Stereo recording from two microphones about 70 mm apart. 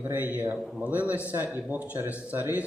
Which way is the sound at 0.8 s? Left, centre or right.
Right.